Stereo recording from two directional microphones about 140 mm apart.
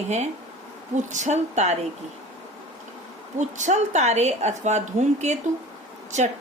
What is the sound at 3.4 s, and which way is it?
A woman's voice, 60° right (ahead or behind).